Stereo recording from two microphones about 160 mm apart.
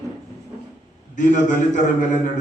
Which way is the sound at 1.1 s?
55° left (ahead or behind).